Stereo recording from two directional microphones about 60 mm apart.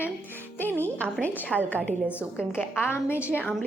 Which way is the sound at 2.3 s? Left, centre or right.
Left.